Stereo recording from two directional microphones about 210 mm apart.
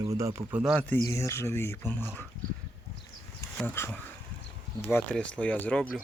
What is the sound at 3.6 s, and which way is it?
Speech, 10° left (ahead or behind).